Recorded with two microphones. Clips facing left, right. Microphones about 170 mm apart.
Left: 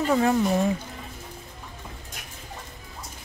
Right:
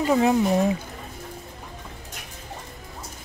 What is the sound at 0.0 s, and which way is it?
Speech, 15° right (ahead or behind).